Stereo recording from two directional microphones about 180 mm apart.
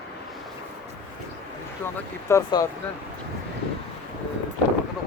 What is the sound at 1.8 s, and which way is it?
Speech, 10° left (ahead or behind).